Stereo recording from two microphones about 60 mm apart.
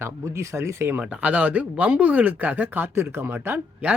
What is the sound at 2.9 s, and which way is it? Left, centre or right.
Speech, right.